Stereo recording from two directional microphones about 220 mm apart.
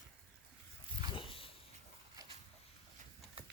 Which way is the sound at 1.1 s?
25° left (ahead or behind).